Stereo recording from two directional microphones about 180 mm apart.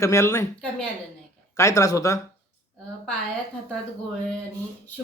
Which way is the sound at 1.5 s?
15° left (ahead or behind).